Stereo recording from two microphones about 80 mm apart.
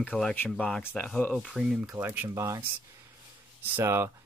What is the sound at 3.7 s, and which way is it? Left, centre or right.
Speech, right.